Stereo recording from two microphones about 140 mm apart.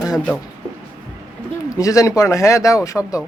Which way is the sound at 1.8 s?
25° left (ahead or behind).